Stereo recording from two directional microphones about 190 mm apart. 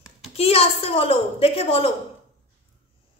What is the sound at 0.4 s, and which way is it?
A woman's voice, 30° left (ahead or behind).